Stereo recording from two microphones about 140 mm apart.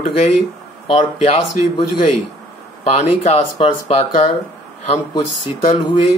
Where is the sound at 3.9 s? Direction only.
50° left (ahead or behind).